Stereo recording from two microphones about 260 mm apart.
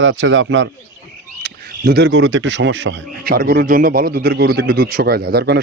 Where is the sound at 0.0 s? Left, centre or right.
Right.